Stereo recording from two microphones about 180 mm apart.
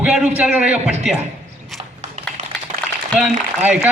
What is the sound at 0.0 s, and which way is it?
A man's voice, 5° right (ahead or behind).